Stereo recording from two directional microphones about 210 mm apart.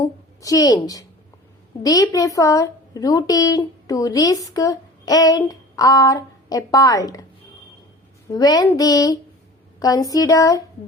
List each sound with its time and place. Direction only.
0.4 s a woman's voice: 15° left (ahead or behind)
8.3 s a woman's voice: 20° left (ahead or behind)